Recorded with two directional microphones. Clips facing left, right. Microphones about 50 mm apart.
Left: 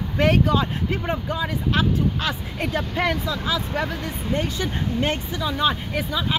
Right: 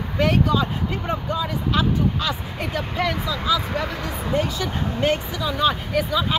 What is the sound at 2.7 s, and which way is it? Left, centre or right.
Speech, left.